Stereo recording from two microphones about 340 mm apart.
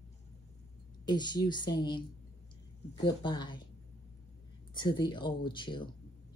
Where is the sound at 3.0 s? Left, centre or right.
Centre.